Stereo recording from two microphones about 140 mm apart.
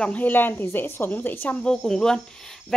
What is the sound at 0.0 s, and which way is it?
A woman's voice, 10° left (ahead or behind).